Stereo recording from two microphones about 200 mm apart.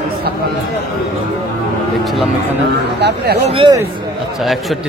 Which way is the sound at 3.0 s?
50° right (ahead or behind).